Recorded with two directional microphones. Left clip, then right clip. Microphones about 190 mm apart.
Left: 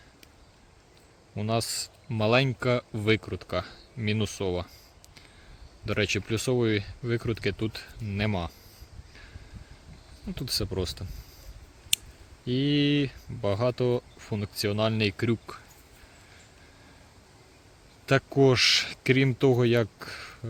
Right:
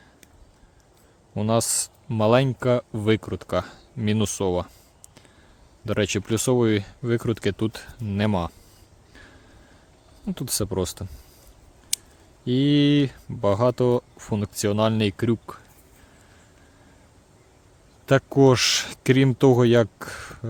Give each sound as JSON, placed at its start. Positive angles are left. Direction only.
{"t": 1.4, "sound": "speech", "side_deg": -45}
{"t": 5.8, "sound": "speech", "side_deg": -35}
{"t": 10.2, "sound": "speech", "side_deg": -45}
{"t": 12.5, "sound": "speech", "side_deg": -40}
{"t": 18.0, "sound": "speech", "side_deg": -35}